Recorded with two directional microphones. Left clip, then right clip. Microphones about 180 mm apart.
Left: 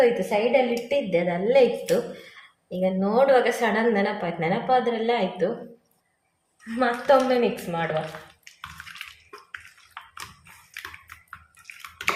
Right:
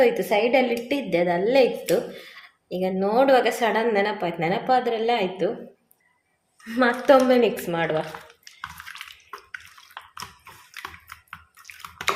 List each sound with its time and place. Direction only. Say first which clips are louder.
0.0 s a woman's voice: right 1 dB; 50° right (ahead or behind)
0.9 s a woman's voice: right 1 dB; 40° right (ahead or behind)
6.7 s a woman's voice: right 2 dB; 60° right (ahead or behind)
8.8 s a sound: right 2 dB; 5° right (ahead or behind)